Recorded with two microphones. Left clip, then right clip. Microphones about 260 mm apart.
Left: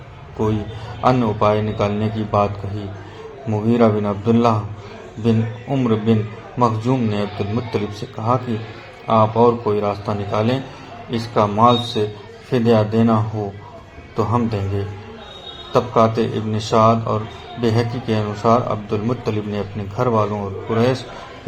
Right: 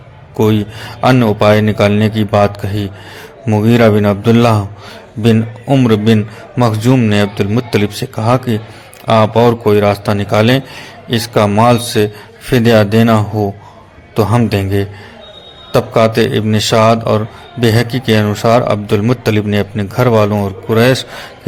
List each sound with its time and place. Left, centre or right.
1.0 s a man's voice: right